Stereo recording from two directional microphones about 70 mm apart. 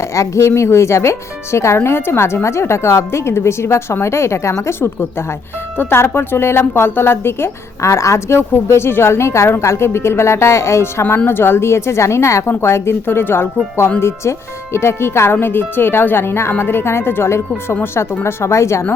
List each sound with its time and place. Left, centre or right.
0.1 s a woman's voice: left